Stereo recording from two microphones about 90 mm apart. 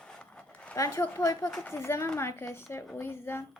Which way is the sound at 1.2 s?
40° left (ahead or behind).